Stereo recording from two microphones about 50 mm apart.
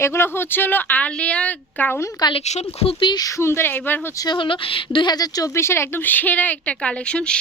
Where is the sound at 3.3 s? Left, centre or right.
Left.